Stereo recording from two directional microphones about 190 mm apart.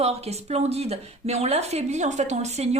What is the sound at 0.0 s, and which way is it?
Speech, 35° right (ahead or behind).